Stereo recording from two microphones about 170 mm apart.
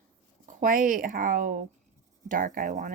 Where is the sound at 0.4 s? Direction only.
50° right (ahead or behind).